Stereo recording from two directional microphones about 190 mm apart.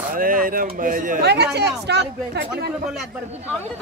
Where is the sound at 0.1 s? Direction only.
50° right (ahead or behind).